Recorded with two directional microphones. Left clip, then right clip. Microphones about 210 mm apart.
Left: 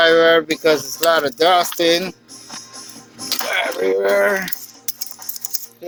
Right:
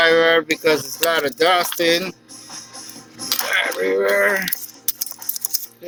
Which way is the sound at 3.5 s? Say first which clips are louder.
Left 1 dB; 20° left (ahead or behind).